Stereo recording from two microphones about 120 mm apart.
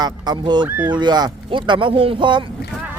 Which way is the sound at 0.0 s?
35° right (ahead or behind).